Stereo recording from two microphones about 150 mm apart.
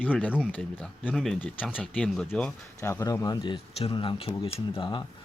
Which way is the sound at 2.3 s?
15° left (ahead or behind).